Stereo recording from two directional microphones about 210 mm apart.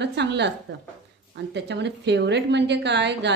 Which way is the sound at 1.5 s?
55° right (ahead or behind).